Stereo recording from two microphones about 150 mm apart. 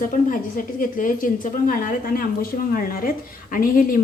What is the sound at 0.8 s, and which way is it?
A woman's voice, 65° left (ahead or behind).